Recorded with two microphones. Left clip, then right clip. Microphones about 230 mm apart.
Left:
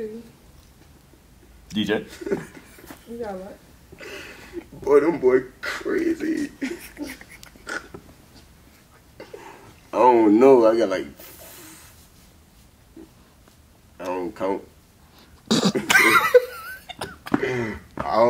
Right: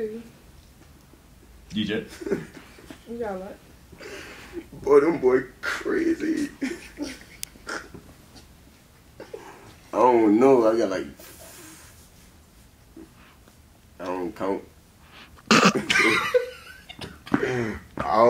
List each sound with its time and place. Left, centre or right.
1.7 s a man's voice: centre
2.0 s speech: centre
4.0 s a sound: centre
4.8 s speech: centre
9.2 s a sound: centre
13.9 s speech: centre
15.4 s throat clearing: centre
15.9 s a sound: centre
17.3 s speech: centre